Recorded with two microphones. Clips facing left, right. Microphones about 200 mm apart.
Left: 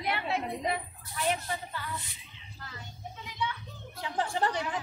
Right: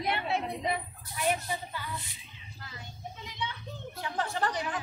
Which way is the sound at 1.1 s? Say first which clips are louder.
Right 1 dB; 15° right (ahead or behind).